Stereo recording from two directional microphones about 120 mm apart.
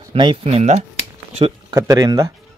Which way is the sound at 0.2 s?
50° right (ahead or behind).